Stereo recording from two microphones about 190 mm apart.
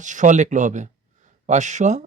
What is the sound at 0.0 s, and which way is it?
Speech, 40° right (ahead or behind).